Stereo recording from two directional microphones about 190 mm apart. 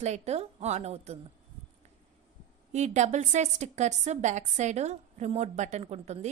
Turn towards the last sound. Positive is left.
turn(degrees=-35)  # may be behind; listen again after turning